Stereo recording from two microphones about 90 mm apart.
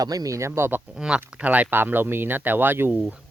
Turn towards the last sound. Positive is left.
turn(degrees=-10)  # may be behind; listen again after turning